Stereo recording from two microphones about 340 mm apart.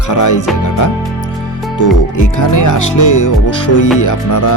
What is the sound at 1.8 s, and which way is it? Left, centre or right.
Speech, left.